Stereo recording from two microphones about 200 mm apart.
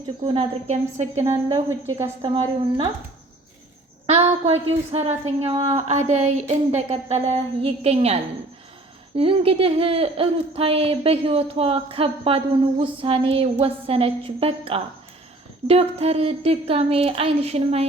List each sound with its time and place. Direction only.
0.3 s a woman's voice: 30° right (ahead or behind)
1.5 s speech: 20° right (ahead or behind)
4.0 s a woman's voice: 30° right (ahead or behind)